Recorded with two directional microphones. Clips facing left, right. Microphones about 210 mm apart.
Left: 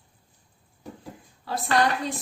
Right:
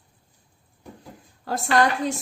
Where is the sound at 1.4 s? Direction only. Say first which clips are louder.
Right 3 dB; 45° right (ahead or behind).